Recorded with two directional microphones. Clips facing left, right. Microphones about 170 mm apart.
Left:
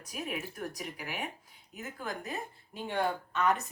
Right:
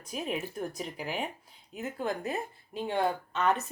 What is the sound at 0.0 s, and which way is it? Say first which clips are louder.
Speech: right 4 dB; 25° right (ahead or behind).